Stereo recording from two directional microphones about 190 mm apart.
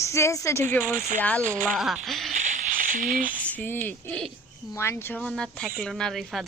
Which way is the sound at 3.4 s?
10° left (ahead or behind).